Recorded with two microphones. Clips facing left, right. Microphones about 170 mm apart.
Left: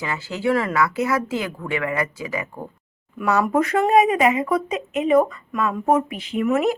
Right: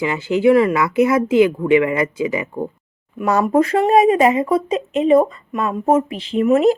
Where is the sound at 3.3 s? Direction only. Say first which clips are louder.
Right 4 dB; 30° right (ahead or behind).